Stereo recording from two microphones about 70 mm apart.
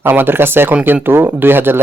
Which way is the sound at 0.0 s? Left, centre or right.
Right.